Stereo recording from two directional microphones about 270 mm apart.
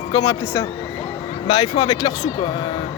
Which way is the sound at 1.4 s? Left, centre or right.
Centre.